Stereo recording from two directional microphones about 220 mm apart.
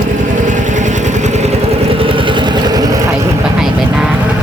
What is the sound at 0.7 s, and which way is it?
Vehicle, 35° right (ahead or behind).